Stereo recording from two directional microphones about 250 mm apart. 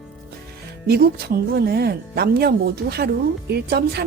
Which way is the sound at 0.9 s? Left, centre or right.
Right.